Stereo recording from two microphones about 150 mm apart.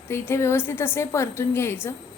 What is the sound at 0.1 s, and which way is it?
A woman's voice, 15° left (ahead or behind).